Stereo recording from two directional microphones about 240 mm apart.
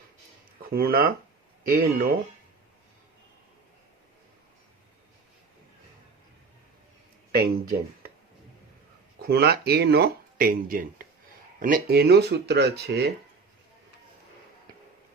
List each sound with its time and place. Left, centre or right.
0.7 s speech: right
7.3 s speech: right
9.2 s speech: right